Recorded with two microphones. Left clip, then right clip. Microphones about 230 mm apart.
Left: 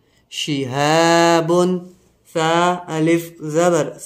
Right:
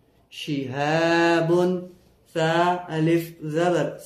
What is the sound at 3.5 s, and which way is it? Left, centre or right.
Speech, left.